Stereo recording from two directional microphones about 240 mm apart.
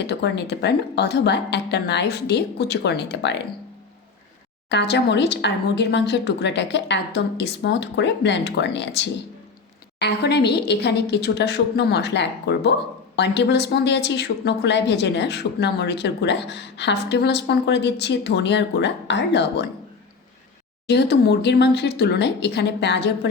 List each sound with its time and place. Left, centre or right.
0.0 s a woman's voice: left
4.7 s a woman's voice: left
20.8 s a woman's voice: left